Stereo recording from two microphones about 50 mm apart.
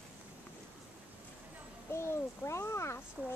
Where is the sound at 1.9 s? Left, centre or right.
Left.